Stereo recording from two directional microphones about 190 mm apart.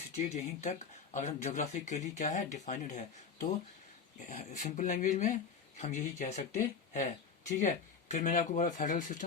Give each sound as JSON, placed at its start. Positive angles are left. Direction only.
{"t": 1.1, "sound": "speech", "side_deg": 35}